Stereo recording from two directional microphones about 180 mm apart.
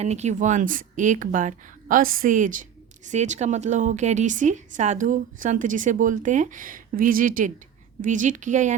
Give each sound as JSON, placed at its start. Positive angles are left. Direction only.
{"t": 0.0, "sound": "speech", "side_deg": -40}